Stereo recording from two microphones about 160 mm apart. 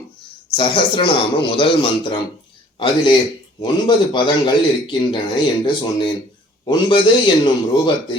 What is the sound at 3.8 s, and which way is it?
Speech, 30° left (ahead or behind).